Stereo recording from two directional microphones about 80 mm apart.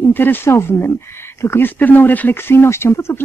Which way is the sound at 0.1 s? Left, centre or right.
Left.